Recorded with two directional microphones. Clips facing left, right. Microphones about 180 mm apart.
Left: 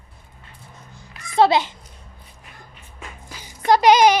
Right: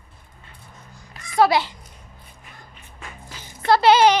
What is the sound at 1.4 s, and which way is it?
Speech, 20° left (ahead or behind).